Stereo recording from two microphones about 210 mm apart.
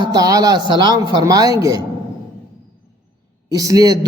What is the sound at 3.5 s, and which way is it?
Speech, 15° right (ahead or behind).